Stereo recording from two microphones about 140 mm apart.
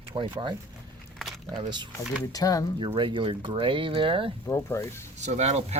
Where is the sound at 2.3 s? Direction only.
25° left (ahead or behind).